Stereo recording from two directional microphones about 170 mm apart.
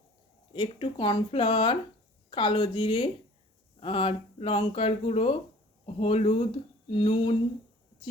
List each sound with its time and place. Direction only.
0.5 s speech: 25° left (ahead or behind)